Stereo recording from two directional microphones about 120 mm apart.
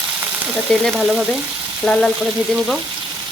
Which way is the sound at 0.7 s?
5° left (ahead or behind).